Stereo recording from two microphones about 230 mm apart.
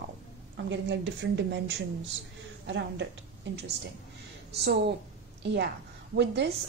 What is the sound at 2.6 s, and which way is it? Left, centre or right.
Speech, right.